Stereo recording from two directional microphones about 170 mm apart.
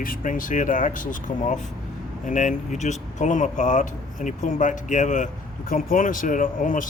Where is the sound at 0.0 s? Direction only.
50° left (ahead or behind).